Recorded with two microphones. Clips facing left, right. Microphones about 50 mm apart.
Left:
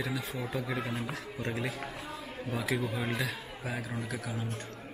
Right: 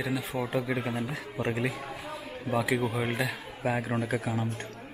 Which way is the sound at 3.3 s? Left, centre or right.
Right.